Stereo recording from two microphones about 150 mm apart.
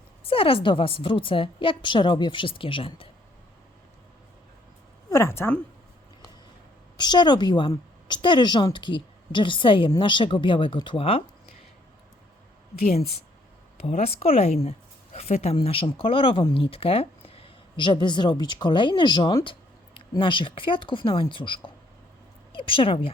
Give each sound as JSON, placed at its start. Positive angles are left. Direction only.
{"t": 0.3, "sound": "a woman's voice", "side_deg": 35}
{"t": 5.0, "sound": "a woman's voice", "side_deg": 20}
{"t": 6.9, "sound": "a woman's voice", "side_deg": 30}
{"t": 13.8, "sound": "a woman's voice", "side_deg": 45}